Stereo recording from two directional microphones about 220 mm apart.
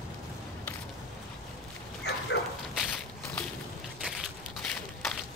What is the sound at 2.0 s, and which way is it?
Bow-wow, 50° left (ahead or behind).